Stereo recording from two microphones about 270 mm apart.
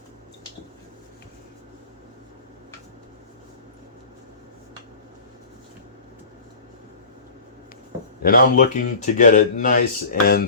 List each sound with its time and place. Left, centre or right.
8.2 s speech: left